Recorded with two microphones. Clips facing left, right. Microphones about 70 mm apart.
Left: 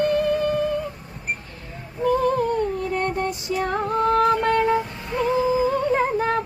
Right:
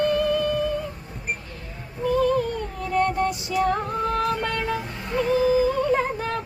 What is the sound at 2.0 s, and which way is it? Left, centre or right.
Female singing, left.